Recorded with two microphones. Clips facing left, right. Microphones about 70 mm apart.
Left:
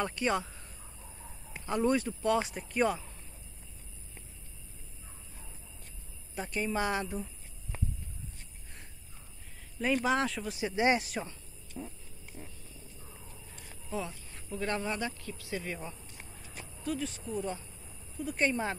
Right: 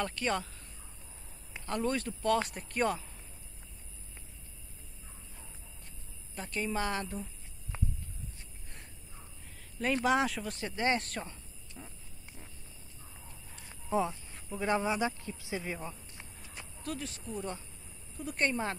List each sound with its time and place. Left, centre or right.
0.0 s a woman's voice: centre
1.7 s speech: centre
6.3 s a woman's voice: centre
9.8 s speech: centre
10.6 s a woman's voice: centre
13.8 s speech: right
16.8 s speech: centre